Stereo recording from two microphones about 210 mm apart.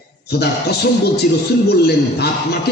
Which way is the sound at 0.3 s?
50° left (ahead or behind).